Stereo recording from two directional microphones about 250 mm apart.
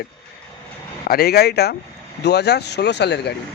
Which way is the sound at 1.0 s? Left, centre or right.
Left.